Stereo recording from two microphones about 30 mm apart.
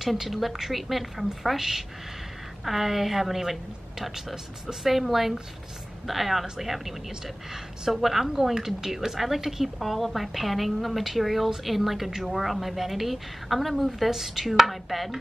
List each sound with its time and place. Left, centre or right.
0.2 s a woman's voice: centre
7.9 s a woman's voice: centre